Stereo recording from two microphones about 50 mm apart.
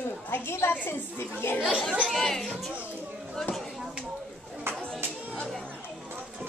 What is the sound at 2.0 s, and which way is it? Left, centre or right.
Speech, centre.